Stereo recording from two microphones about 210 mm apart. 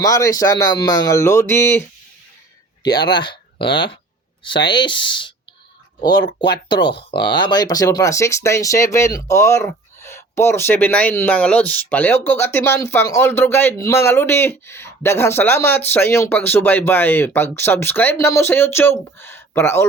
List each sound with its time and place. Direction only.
0.0 s speech: 15° left (ahead or behind)
2.8 s speech: 20° left (ahead or behind)